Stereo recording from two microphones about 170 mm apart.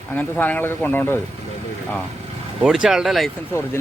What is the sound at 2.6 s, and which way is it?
Speech, 5° right (ahead or behind).